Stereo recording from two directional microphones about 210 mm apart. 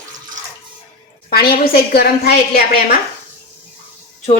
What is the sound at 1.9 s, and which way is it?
A woman's voice, 50° left (ahead or behind).